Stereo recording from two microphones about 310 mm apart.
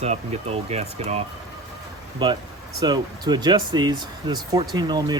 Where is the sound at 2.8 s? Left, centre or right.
Centre.